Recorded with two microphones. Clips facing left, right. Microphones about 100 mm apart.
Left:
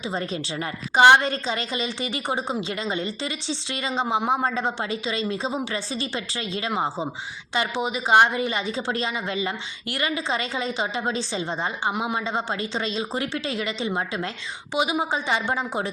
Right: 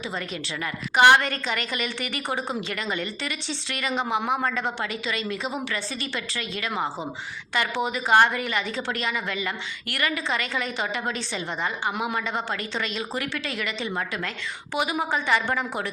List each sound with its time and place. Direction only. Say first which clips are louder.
0.1 s a woman's voice: left 4 dB; 35° left (ahead or behind)